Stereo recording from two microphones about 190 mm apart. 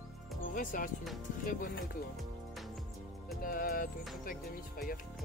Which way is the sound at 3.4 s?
50° left (ahead or behind).